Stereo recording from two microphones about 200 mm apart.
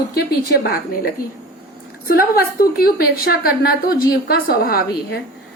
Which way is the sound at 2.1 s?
45° left (ahead or behind).